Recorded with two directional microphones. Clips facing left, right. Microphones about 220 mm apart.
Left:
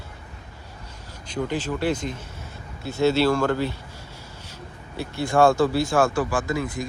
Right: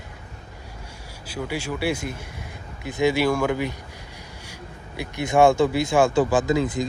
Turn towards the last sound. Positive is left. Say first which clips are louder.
# right 5 dB
turn(degrees=-20)  # may be behind; listen again after turning